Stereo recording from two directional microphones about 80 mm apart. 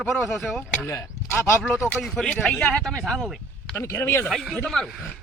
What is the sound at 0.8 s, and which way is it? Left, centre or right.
Speech, left.